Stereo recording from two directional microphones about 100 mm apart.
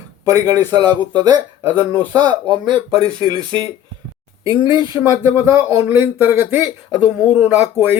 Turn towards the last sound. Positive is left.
turn(degrees=-20)  # may be behind; listen again after turning